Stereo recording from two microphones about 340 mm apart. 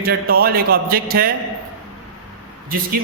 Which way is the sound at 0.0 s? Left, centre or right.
Right.